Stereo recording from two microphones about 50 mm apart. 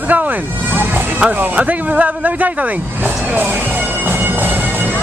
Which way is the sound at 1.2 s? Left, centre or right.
Right.